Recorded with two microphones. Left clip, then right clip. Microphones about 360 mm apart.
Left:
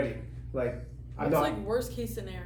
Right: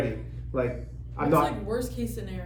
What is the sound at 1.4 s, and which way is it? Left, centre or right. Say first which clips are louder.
Speech: right 1 dB; left.